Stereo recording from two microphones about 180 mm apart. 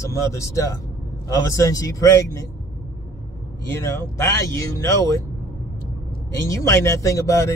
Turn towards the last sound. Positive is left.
turn(degrees=15)  # may be behind; listen again after turning